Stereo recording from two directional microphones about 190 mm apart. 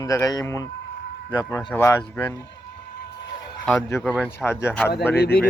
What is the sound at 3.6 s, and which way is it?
Speech, 10° left (ahead or behind).